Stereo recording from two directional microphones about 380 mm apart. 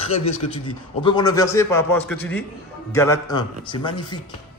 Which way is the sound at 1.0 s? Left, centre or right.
Centre.